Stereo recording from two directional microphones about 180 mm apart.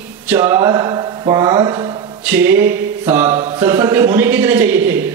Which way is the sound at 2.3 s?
10° right (ahead or behind).